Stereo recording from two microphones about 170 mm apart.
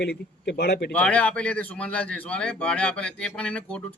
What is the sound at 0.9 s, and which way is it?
A man's voice, 5° left (ahead or behind).